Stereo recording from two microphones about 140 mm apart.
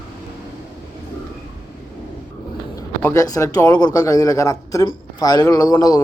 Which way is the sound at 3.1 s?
25° left (ahead or behind).